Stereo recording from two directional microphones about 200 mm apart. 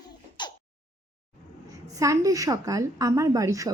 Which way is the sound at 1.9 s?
15° right (ahead or behind).